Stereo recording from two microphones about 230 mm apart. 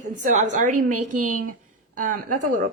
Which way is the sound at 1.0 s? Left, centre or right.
Right.